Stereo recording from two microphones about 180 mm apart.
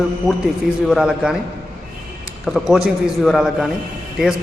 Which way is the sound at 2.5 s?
Centre (ahead or behind).